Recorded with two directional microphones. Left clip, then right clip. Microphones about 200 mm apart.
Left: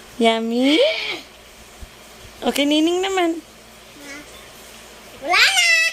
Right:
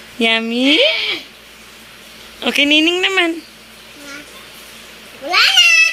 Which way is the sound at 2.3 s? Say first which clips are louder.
Right 5 dB; 15° left (ahead or behind).